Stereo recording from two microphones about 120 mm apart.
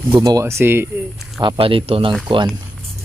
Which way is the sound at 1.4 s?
50° right (ahead or behind).